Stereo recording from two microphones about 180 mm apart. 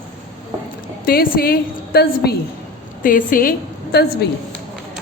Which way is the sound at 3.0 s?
50° left (ahead or behind).